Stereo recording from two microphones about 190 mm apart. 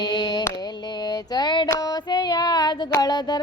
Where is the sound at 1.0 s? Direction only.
20° left (ahead or behind).